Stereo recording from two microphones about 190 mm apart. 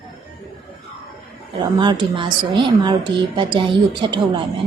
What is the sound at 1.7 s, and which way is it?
A woman's voice, 25° right (ahead or behind).